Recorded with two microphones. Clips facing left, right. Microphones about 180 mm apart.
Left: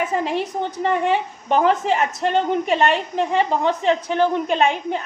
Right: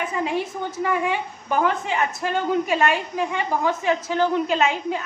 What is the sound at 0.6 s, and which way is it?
A woman's voice, 30° left (ahead or behind).